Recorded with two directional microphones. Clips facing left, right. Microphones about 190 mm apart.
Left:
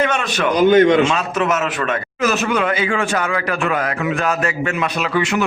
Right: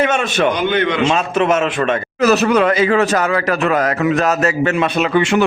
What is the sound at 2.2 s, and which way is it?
A man's voice, 40° right (ahead or behind).